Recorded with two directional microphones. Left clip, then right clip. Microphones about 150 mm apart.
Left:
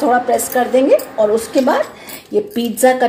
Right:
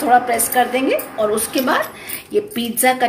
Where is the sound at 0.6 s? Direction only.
45° left (ahead or behind).